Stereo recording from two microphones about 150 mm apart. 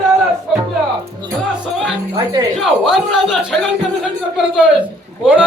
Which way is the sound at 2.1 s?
25° right (ahead or behind).